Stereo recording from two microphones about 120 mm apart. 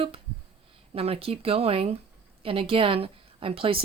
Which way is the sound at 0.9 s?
50° right (ahead or behind).